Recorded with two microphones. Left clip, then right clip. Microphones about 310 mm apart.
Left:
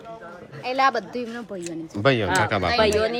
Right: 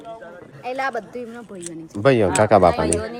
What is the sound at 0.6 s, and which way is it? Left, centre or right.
Speech, left.